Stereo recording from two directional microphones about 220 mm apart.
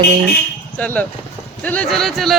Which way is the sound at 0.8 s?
5° left (ahead or behind).